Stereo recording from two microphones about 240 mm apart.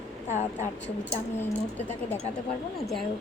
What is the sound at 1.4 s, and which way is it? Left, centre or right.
Speech, centre.